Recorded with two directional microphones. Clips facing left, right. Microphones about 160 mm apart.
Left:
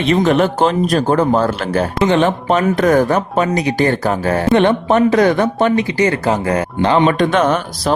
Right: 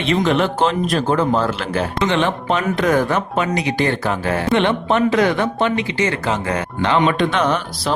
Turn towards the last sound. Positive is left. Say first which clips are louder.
# left 4 dB
turn(degrees=45)  # may be behind; listen again after turning